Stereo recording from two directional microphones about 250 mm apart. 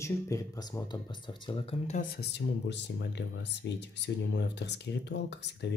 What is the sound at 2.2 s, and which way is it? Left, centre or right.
Speech, left.